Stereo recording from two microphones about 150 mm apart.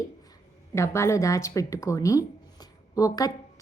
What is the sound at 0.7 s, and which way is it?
Speech, 20° left (ahead or behind).